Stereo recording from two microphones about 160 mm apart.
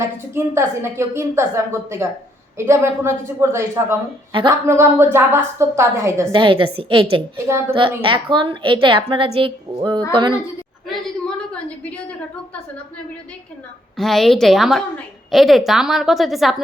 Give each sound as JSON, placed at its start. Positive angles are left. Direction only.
{"t": 0.3, "sound": "a woman's voice", "side_deg": -15}
{"t": 4.3, "sound": "a woman's voice", "side_deg": -30}
{"t": 4.6, "sound": "a woman's voice", "side_deg": -15}
{"t": 6.3, "sound": "a woman's voice", "side_deg": -30}
{"t": 7.3, "sound": "a woman's voice", "side_deg": -15}
{"t": 7.7, "sound": "a woman's voice", "side_deg": -35}
{"t": 11.8, "sound": "a woman's voice", "side_deg": 10}
{"t": 13.9, "sound": "a woman's voice", "side_deg": 0}